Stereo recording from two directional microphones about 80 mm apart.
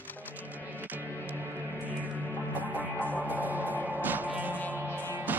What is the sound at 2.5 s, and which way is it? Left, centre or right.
Music, right.